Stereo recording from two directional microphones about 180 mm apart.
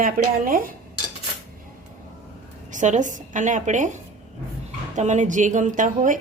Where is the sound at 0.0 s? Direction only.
50° right (ahead or behind).